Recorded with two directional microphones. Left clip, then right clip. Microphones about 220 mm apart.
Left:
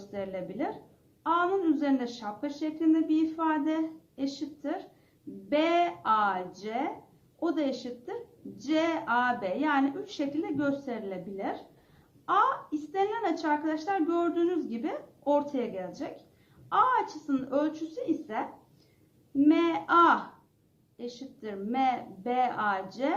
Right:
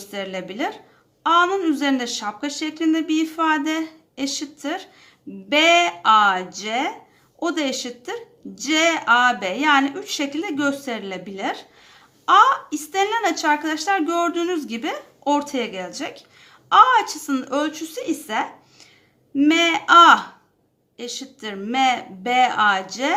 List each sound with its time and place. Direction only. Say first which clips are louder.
0.1 s a woman's voice: right 7 dB; 25° right (ahead or behind)